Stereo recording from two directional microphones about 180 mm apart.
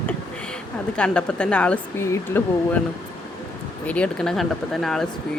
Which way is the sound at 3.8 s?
5° left (ahead or behind).